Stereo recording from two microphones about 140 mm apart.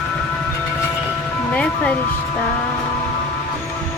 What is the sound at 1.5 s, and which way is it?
Music, 10° left (ahead or behind).